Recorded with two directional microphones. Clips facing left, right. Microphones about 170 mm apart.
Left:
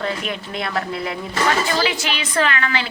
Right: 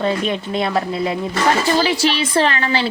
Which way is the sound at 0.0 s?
25° right (ahead or behind).